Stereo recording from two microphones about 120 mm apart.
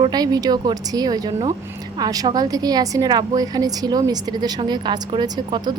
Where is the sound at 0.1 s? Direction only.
35° right (ahead or behind).